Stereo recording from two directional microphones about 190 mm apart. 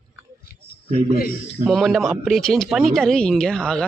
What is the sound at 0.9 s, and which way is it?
Speech, 35° right (ahead or behind).